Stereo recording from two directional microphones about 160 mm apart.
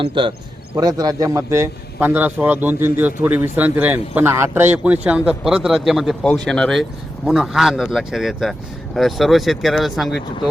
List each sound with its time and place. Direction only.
0.0 s a man's voice: 30° right (ahead or behind); by 10.2 s centre (ahead or behind)